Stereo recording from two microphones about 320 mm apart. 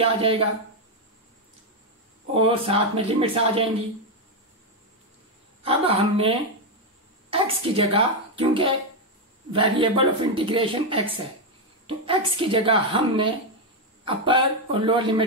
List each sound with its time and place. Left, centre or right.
0.0 s a woman's voice: centre
2.3 s a woman's voice: centre
5.6 s a woman's voice: centre